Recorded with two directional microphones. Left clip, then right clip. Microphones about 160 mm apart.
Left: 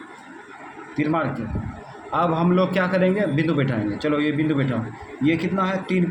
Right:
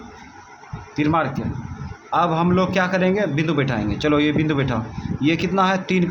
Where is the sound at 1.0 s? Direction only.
40° right (ahead or behind).